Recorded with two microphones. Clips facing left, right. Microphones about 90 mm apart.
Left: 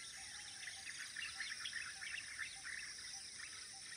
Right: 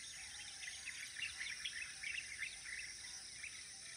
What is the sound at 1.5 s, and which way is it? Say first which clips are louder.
Bird vocalization: left 2 dB; 35° left (ahead or behind).